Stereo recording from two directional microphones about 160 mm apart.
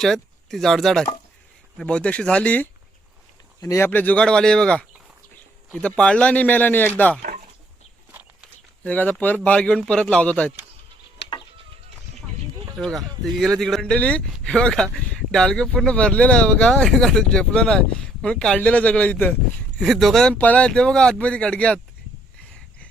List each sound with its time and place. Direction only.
0.0 s speech: centre (ahead or behind)
8.8 s speech: 10° left (ahead or behind)
12.8 s speech: centre (ahead or behind)